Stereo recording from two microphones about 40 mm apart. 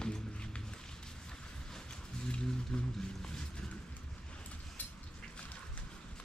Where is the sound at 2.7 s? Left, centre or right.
Centre.